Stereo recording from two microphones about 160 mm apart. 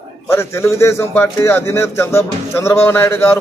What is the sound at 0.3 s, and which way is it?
Speech, 15° left (ahead or behind).